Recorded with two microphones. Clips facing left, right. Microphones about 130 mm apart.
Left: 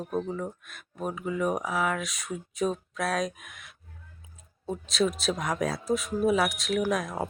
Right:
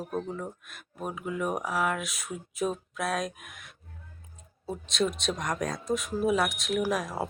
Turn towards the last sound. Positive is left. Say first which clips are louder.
# left 1 dB
turn(degrees=-5)  # may be behind; listen again after turning